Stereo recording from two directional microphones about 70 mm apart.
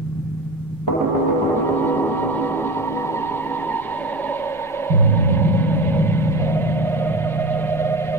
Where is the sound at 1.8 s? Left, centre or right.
Left.